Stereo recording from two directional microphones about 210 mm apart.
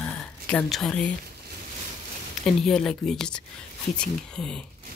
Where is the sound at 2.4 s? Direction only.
Centre (ahead or behind).